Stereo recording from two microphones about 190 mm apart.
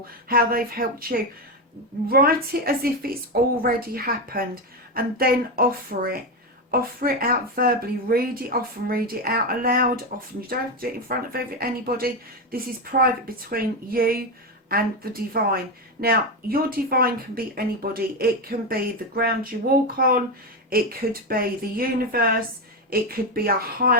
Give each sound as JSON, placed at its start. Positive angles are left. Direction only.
{"t": 0.3, "sound": "a woman's voice", "side_deg": -50}